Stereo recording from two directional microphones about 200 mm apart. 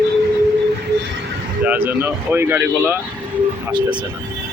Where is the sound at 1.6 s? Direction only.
10° right (ahead or behind).